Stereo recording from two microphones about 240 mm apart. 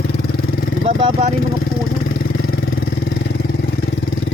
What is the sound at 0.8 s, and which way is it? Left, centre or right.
Speech, right.